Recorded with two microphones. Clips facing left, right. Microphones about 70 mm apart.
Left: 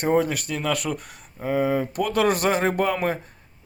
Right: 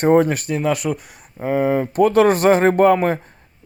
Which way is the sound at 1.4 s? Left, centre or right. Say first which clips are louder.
Right 4 dB; right.